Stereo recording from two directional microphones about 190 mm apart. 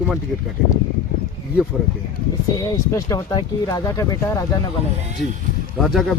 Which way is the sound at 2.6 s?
20° left (ahead or behind).